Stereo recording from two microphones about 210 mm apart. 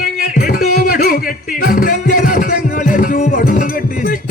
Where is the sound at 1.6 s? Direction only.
45° left (ahead or behind).